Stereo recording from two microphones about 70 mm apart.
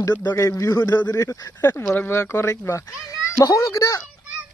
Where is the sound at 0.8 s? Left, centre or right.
Left.